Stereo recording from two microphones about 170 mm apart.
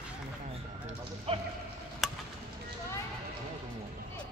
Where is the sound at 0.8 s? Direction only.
35° right (ahead or behind).